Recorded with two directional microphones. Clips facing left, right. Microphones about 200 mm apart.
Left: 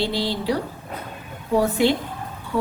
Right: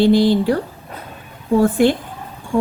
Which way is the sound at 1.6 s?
50° right (ahead or behind).